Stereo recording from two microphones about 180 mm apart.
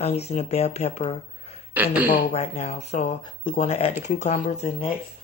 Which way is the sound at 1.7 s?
10° right (ahead or behind).